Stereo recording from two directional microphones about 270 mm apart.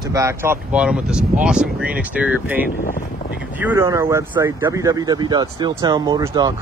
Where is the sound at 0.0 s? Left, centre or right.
Centre.